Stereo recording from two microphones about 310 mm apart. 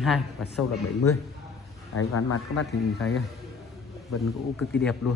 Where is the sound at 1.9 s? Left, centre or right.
Left.